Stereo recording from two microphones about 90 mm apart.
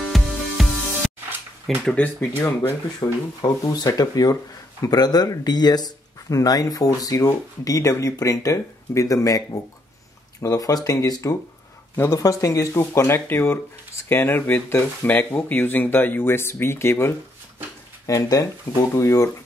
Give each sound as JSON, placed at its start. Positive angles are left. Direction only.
{"t": 0.1, "sound": "music", "side_deg": 0}
{"t": 1.9, "sound": "speech", "side_deg": 15}
{"t": 2.4, "sound": "speech", "side_deg": 40}
{"t": 11.9, "sound": "speech", "side_deg": 25}
{"t": 12.2, "sound": "speech", "side_deg": 40}
{"t": 18.0, "sound": "speech", "side_deg": 40}